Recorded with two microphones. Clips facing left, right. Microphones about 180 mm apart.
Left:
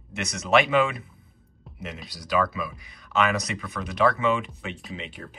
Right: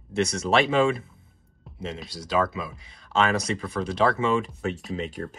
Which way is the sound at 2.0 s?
25° right (ahead or behind).